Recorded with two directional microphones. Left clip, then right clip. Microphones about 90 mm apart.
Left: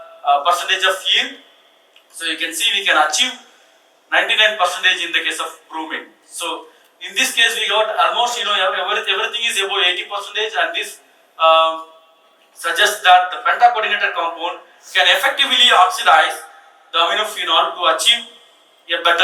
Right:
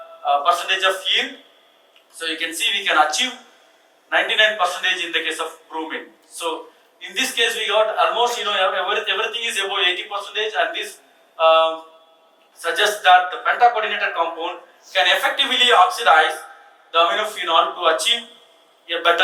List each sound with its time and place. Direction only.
0.3 s a man's voice: 20° right (ahead or behind)
4.3 s a man's voice: 20° right (ahead or behind)
7.2 s a man's voice: 20° right (ahead or behind)